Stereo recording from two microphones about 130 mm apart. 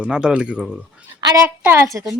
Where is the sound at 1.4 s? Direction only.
20° right (ahead or behind).